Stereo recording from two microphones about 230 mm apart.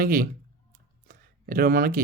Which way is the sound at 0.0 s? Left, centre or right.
Right.